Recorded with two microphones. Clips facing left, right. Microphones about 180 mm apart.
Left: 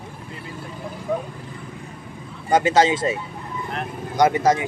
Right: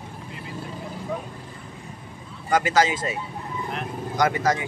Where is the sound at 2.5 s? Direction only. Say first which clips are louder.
Left 4 dB; 25° left (ahead or behind).